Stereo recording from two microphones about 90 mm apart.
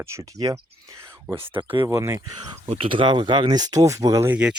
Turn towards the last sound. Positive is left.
turn(degrees=-10)  # may be behind; listen again after turning